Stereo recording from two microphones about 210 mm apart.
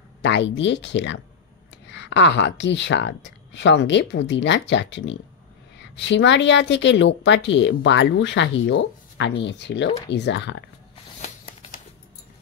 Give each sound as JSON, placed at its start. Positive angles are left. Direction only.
{"t": 0.2, "sound": "a woman's voice", "side_deg": 55}
{"t": 11.1, "sound": "shuffling cards", "side_deg": 35}